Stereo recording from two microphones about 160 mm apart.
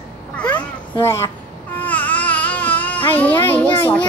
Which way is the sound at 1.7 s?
10° left (ahead or behind).